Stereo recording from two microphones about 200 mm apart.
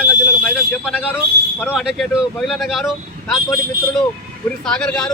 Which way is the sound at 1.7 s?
Centre (ahead or behind).